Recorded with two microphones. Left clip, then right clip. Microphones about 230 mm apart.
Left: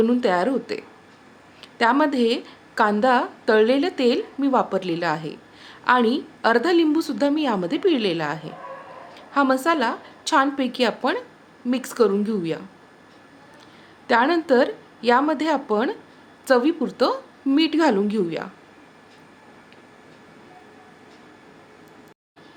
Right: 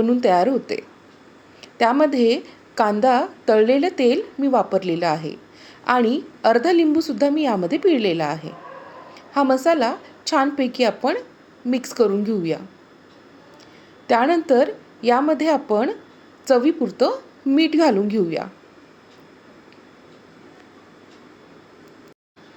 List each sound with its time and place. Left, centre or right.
0.0 s a woman's voice: centre
14.1 s a woman's voice: centre